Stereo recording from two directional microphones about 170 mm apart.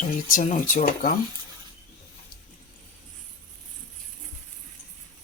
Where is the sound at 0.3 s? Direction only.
55° left (ahead or behind).